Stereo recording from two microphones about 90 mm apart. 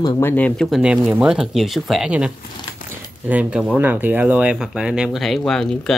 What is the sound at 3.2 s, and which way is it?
Speech, 15° right (ahead or behind).